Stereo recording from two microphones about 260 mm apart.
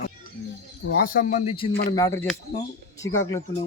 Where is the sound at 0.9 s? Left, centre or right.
Left.